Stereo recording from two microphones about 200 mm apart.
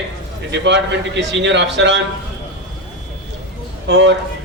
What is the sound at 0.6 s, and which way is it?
A man's voice, 60° right (ahead or behind).